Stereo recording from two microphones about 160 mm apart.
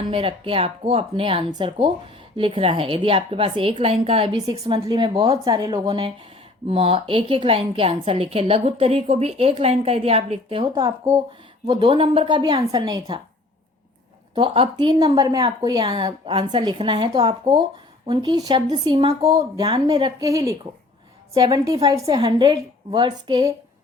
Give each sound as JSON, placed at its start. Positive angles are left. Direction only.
{"t": 0.1, "sound": "a woman's voice", "side_deg": -35}
{"t": 14.3, "sound": "a woman's voice", "side_deg": -35}